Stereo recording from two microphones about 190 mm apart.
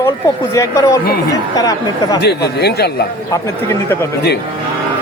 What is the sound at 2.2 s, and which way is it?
Speech, 60° left (ahead or behind).